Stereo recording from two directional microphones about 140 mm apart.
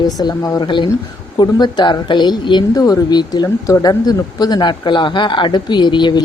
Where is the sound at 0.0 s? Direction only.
30° left (ahead or behind).